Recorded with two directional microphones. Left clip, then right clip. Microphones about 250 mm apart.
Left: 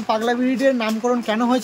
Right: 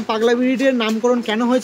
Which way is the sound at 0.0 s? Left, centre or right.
Centre.